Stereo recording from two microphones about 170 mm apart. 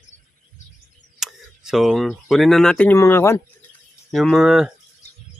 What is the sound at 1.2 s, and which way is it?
Speech, centre (ahead or behind).